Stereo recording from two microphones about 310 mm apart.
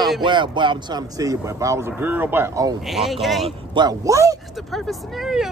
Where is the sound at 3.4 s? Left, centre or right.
Centre.